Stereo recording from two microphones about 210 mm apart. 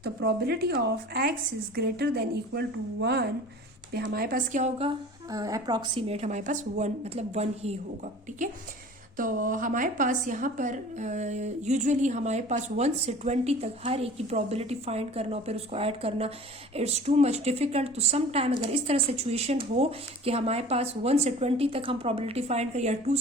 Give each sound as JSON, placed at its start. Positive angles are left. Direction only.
{"t": 0.0, "sound": "a woman's voice", "side_deg": -50}
{"t": 5.3, "sound": "a woman's voice", "side_deg": -15}